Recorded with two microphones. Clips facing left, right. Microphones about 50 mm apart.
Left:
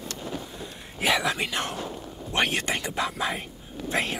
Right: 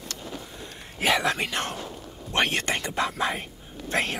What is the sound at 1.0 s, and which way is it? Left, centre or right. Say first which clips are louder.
Whispering: right 1 dB; right.